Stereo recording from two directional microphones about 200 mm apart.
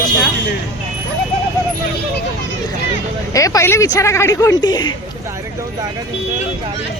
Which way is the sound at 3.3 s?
15° left (ahead or behind).